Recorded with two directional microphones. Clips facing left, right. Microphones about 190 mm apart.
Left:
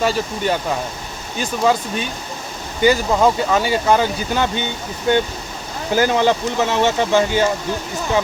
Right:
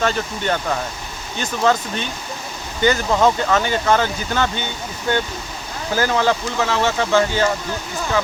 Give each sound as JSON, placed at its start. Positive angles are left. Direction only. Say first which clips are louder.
{"t": 0.0, "sound": "speech", "louder": "left 2 dB", "side_deg": 10}
{"t": 5.9, "sound": "speech", "louder": "left 3 dB", "side_deg": 15}